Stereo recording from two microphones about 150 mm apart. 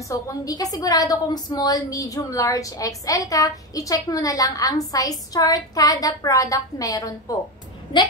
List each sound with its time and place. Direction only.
0.1 s a woman's voice: 20° left (ahead or behind)